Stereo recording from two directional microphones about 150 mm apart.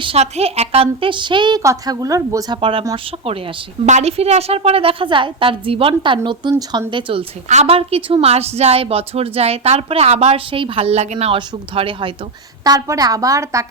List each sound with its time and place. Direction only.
0.0 s a woman's voice: 40° right (ahead or behind); by 2.6 s 25° right (ahead or behind)
2.6 s a woman's voice: 35° right (ahead or behind)
7.4 s a woman's voice: 50° right (ahead or behind)
12.6 s a woman's voice: 25° right (ahead or behind)